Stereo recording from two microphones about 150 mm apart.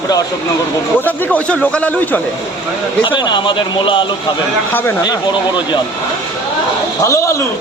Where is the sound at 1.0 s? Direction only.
10° left (ahead or behind).